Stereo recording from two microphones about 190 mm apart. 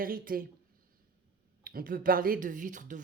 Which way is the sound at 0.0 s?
50° right (ahead or behind).